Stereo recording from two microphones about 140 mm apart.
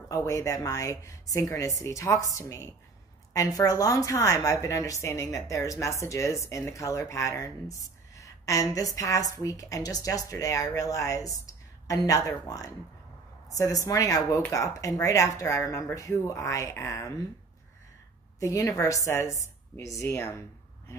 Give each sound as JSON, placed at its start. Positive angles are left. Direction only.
{"t": 0.1, "sound": "a woman's voice", "side_deg": 20}
{"t": 18.4, "sound": "a woman's voice", "side_deg": 20}